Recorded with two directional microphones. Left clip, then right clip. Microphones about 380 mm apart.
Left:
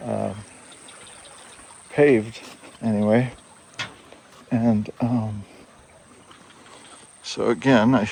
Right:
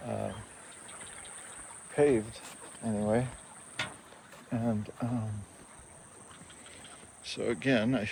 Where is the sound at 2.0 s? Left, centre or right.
Left.